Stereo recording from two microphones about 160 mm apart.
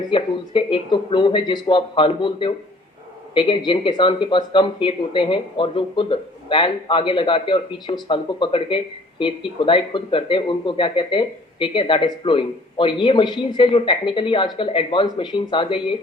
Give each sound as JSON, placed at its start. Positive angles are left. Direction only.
{"t": 0.1, "sound": "speech", "side_deg": 30}